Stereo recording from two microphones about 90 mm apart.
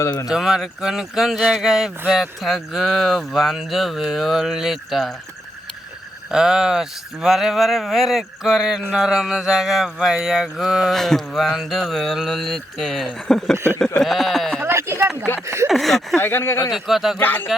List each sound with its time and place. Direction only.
0.3 s speech: 5° right (ahead or behind)
6.3 s speech: 5° right (ahead or behind)
14.6 s a sound: 30° right (ahead or behind)
15.4 s speech: 30° right (ahead or behind)
15.7 s speech: centre (ahead or behind)
16.2 s speech: 25° left (ahead or behind)
16.7 s speech: centre (ahead or behind)
17.2 s speech: 20° left (ahead or behind)